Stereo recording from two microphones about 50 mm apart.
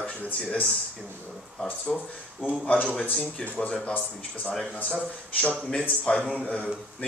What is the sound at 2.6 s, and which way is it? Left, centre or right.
Speech, left.